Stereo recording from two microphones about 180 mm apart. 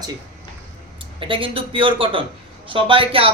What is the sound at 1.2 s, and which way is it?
Speech, 30° right (ahead or behind).